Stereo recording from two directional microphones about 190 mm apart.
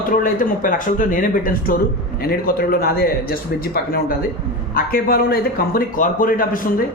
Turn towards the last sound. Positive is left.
turn(degrees=50)  # may be behind; listen again after turning